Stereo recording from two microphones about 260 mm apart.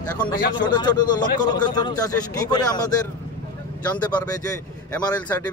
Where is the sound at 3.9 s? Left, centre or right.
Centre.